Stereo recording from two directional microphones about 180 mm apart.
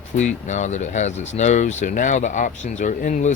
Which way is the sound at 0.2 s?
40° left (ahead or behind).